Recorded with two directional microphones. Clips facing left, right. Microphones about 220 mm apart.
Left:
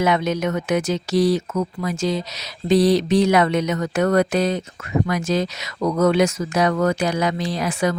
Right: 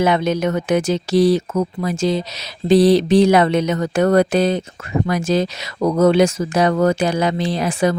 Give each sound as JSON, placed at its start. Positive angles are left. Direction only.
{"t": 0.0, "sound": "speech", "side_deg": -30}
{"t": 2.6, "sound": "a sound", "side_deg": -30}
{"t": 5.0, "sound": "speech", "side_deg": -30}